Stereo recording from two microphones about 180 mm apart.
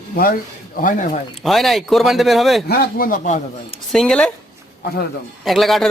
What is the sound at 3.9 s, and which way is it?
Speech, 5° left (ahead or behind).